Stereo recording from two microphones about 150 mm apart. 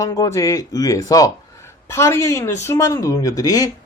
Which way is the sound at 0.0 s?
20° left (ahead or behind).